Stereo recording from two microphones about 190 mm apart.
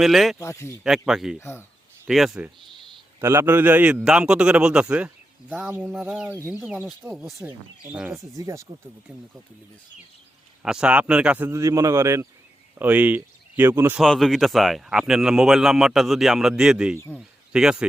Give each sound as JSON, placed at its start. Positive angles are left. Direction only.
{"t": 0.0, "sound": "speech", "side_deg": 0}
{"t": 0.3, "sound": "speech", "side_deg": 15}
{"t": 0.9, "sound": "speech", "side_deg": 0}
{"t": 1.4, "sound": "speech", "side_deg": 10}
{"t": 2.0, "sound": "speech", "side_deg": 0}
{"t": 3.2, "sound": "a man's voice", "side_deg": -15}
{"t": 9.1, "sound": "speech", "side_deg": -5}
{"t": 10.6, "sound": "a man's voice", "side_deg": -5}
{"t": 14.0, "sound": "speech", "side_deg": 0}